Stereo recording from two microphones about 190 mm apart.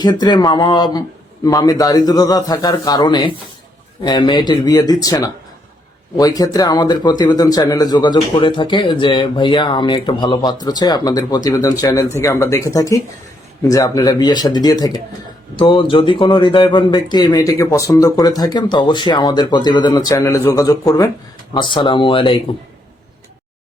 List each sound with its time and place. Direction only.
0.0 s speech: 20° left (ahead or behind)